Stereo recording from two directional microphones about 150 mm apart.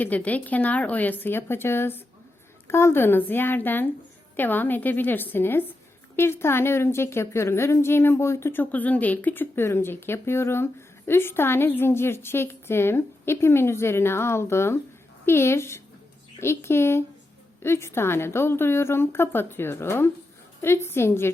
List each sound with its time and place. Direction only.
0.0 s a woman's voice: 10° left (ahead or behind)